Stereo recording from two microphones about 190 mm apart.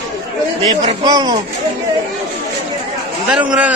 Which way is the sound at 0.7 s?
20° right (ahead or behind).